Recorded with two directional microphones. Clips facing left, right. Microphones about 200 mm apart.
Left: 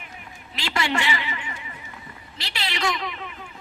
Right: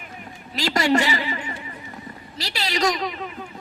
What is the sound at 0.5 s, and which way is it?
A woman's voice, 40° right (ahead or behind).